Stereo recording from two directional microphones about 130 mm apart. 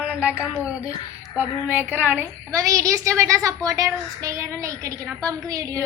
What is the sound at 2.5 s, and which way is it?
A woman's voice, 25° right (ahead or behind).